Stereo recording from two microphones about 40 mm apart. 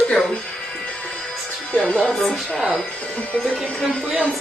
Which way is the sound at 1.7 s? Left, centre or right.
Left.